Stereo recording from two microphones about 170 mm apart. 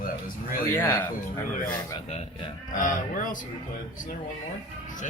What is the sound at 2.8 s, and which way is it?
Speech, 50° left (ahead or behind).